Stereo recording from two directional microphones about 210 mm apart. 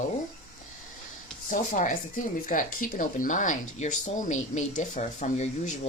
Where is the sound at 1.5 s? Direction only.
40° left (ahead or behind).